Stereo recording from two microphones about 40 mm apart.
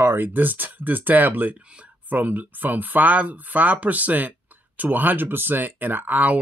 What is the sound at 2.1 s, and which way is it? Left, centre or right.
Speech, right.